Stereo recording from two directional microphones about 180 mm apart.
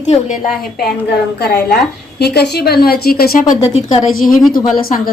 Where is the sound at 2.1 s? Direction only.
65° left (ahead or behind).